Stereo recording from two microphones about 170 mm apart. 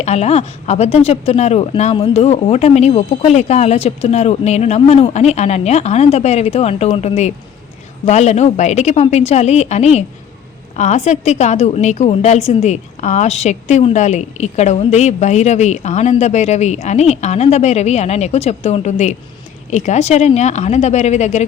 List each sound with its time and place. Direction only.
0.0 s a woman's voice: 40° left (ahead or behind)